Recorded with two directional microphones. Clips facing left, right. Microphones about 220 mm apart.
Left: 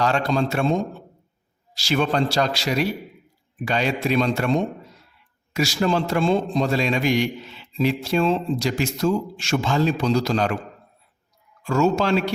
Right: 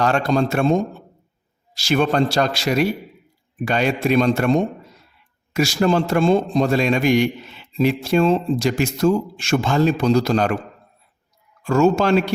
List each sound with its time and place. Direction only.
0.0 s a man's voice: 50° right (ahead or behind)
11.6 s a man's voice: 50° right (ahead or behind)